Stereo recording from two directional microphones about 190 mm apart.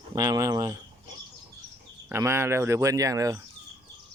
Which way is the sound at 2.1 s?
15° right (ahead or behind).